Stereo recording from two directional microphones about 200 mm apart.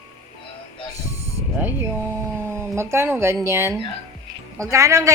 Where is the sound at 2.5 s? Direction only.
15° right (ahead or behind).